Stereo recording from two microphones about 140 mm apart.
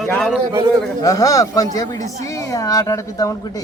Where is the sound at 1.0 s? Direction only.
25° left (ahead or behind).